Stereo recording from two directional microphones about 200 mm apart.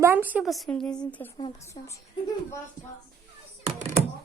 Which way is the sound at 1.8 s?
25° left (ahead or behind).